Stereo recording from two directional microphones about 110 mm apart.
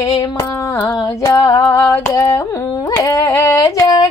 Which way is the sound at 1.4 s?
35° left (ahead or behind).